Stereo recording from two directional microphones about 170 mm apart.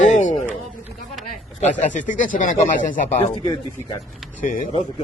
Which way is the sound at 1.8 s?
50° left (ahead or behind).